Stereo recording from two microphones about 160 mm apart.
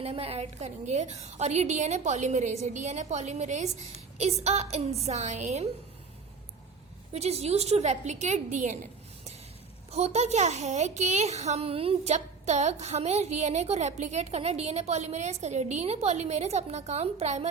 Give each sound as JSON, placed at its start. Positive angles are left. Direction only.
{"t": 0.0, "sound": "a child's voice", "side_deg": -40}
{"t": 7.1, "sound": "a child's voice", "side_deg": -40}